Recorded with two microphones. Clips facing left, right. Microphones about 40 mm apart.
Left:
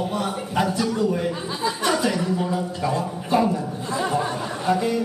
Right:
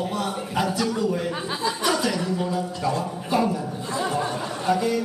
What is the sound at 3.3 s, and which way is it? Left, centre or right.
Speech, centre.